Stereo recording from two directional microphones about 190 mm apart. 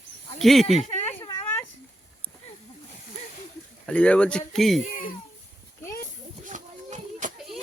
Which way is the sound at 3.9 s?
5° left (ahead or behind).